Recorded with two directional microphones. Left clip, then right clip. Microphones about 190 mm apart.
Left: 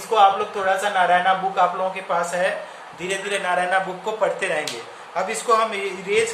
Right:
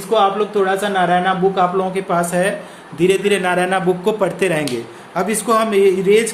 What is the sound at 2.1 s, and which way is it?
A man's voice, 55° right (ahead or behind).